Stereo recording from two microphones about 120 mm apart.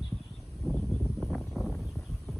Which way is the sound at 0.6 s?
Centre (ahead or behind).